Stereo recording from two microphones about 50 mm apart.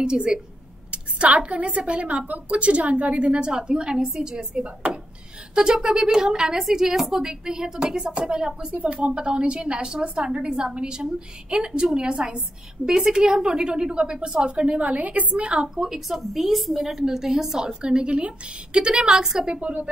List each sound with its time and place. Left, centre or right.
0.0 s a woman's voice: centre
3.3 s a woman's voice: centre
17.6 s a woman's voice: centre